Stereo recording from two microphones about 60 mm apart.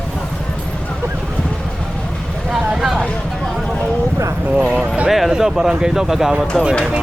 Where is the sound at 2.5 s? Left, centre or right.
Centre.